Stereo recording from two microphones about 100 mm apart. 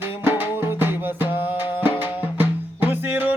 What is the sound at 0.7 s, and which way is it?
Music, 20° right (ahead or behind).